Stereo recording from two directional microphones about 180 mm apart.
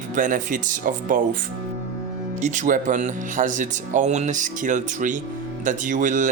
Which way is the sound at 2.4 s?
45° right (ahead or behind).